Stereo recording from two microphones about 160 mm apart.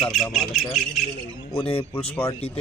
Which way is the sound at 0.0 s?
Centre (ahead or behind).